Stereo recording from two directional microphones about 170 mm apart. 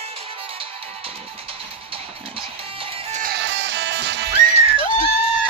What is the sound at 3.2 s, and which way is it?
Music, 85° right.